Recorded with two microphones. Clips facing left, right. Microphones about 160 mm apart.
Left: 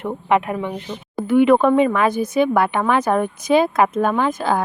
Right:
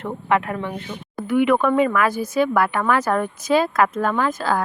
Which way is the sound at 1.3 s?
30° left (ahead or behind).